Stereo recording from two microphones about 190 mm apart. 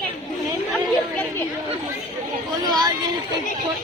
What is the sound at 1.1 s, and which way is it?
Chatter, 10° left (ahead or behind).